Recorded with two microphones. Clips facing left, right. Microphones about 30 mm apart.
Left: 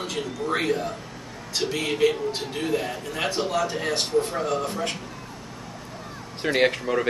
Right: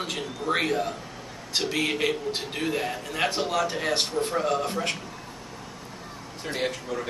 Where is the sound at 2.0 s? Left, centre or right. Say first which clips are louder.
Left 9 dB; right.